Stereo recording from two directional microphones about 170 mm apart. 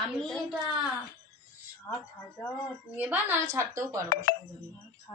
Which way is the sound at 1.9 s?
25° left (ahead or behind).